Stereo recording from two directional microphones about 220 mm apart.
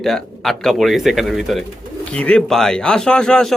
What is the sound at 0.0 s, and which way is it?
Speech, centre (ahead or behind).